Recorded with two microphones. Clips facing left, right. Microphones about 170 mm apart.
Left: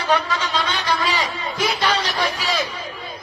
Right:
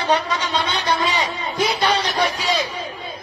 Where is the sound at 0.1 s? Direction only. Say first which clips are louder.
Even; 20° right (ahead or behind).